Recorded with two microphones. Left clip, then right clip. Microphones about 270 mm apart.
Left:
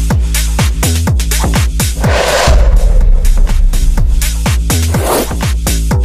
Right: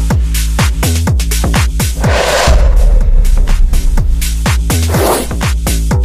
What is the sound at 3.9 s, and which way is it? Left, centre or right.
Music, centre.